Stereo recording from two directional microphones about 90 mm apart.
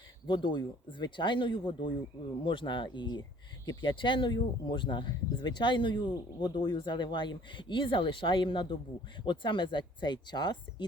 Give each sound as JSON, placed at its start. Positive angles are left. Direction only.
{"t": 0.3, "sound": "speech", "side_deg": 60}